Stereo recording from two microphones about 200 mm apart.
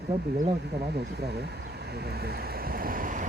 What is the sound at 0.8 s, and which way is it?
Speech, 55° right (ahead or behind).